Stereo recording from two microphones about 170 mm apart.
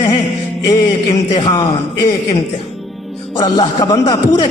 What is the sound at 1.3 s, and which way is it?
Speech, 25° left (ahead or behind).